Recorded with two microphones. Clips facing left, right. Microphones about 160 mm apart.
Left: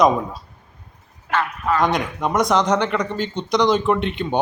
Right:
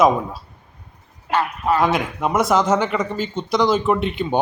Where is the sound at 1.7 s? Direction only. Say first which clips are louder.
Left 1 dB; 5° right (ahead or behind).